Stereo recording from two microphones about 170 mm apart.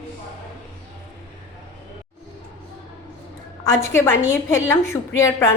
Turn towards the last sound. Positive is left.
turn(degrees=15)  # may be behind; listen again after turning